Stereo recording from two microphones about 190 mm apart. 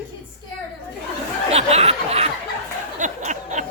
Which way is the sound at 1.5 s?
35° right (ahead or behind).